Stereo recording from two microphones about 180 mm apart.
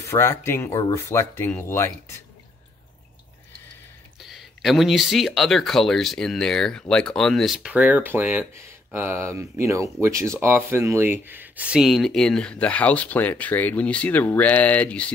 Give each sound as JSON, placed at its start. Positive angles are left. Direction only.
{"t": 0.0, "sound": "speech", "side_deg": 15}
{"t": 4.2, "sound": "speech", "side_deg": 0}